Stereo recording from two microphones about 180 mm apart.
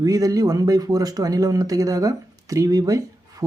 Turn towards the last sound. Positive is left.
turn(degrees=-20)  # may be behind; listen again after turning